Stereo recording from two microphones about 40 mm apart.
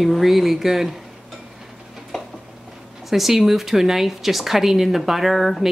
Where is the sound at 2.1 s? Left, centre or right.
Centre.